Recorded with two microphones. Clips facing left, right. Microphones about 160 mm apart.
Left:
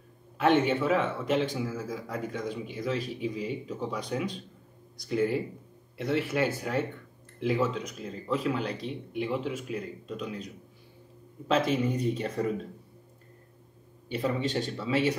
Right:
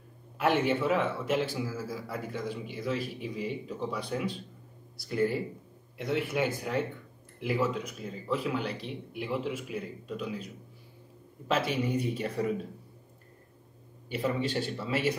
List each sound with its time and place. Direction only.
0.4 s speech: 10° right (ahead or behind)
4.9 s speech: 5° right (ahead or behind)
11.5 s speech: 10° right (ahead or behind)
14.0 s speech: 10° right (ahead or behind)